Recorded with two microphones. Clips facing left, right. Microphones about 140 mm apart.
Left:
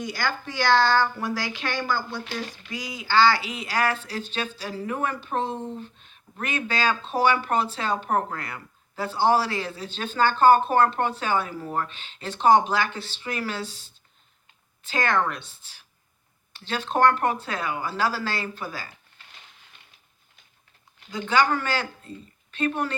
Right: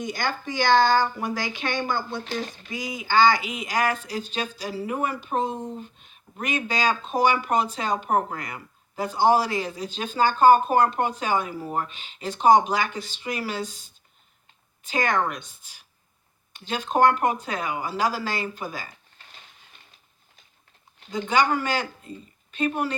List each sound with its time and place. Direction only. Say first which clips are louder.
0.0 s a woman's voice: right 1 dB; 20° right (ahead or behind)
13.7 s speech: left 1 dB; 45° right (ahead or behind)
14.8 s speech: even; 15° right (ahead or behind)
21.2 s speech: even; 15° right (ahead or behind)